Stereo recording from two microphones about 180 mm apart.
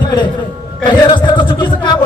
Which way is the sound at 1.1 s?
25° left (ahead or behind).